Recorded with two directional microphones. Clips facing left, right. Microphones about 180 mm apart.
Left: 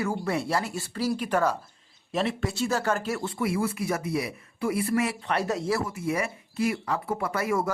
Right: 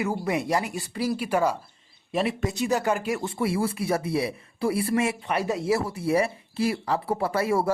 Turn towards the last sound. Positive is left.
turn(degrees=-30)  # may be behind; listen again after turning